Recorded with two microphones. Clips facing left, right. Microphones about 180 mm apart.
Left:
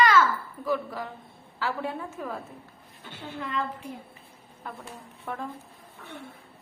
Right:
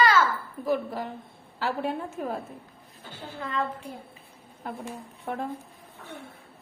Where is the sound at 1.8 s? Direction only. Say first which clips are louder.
Right 3 dB; 55° right (ahead or behind).